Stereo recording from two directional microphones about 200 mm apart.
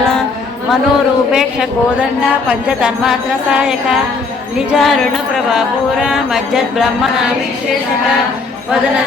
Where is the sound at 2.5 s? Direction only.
5° right (ahead or behind).